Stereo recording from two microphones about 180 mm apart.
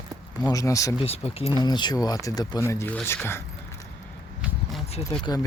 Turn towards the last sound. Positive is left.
turn(degrees=20)  # may be behind; listen again after turning